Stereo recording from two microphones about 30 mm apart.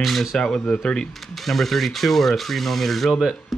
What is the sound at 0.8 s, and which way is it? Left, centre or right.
Speech, left.